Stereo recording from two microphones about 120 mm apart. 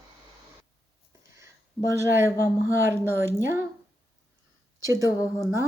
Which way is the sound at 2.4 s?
20° right (ahead or behind).